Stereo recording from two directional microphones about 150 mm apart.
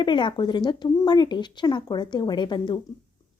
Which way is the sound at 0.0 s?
30° left (ahead or behind).